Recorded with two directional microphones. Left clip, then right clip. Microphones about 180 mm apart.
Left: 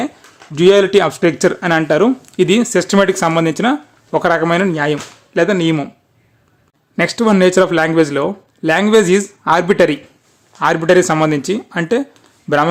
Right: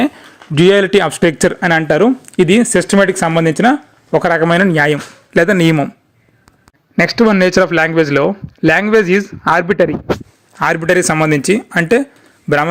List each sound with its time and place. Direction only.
0.5 s speech: 20° right (ahead or behind)
7.0 s speech: 15° right (ahead or behind)
9.6 s a man's voice: 5° right (ahead or behind)
10.6 s speech: 20° right (ahead or behind)